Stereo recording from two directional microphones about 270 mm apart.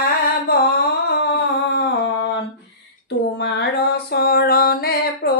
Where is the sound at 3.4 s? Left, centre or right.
Left.